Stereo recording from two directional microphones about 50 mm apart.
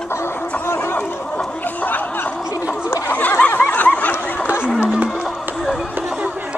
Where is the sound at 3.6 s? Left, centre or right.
Left.